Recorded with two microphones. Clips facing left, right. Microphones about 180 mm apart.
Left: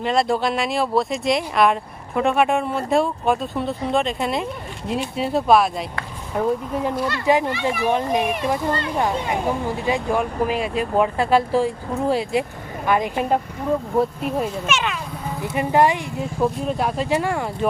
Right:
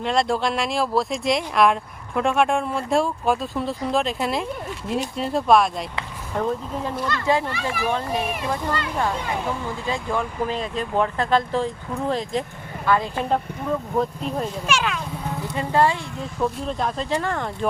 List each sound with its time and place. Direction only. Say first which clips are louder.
0.0 s speech: left 2 dB; centre (ahead or behind)
7.5 s a child's voice: left 4 dB; 25° left (ahead or behind); by 14.9 s centre (ahead or behind)
15.5 s speech: left 3 dB; 15° left (ahead or behind)